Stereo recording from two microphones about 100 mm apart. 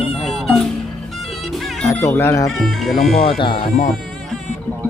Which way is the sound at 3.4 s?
55° left (ahead or behind).